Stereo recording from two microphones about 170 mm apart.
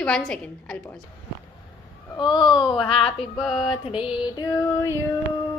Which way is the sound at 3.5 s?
30° left (ahead or behind).